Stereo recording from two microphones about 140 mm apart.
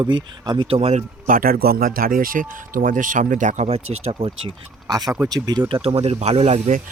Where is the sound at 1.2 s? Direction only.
85° right; by 4.5 s 45° right (ahead or behind).